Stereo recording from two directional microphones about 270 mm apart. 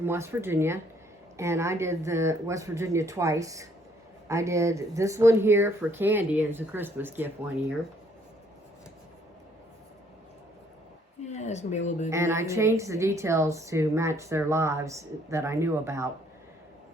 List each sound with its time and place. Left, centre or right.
0.0 s a woman's voice: centre
11.3 s a sound: left
11.9 s speech: left
12.1 s a woman's voice: centre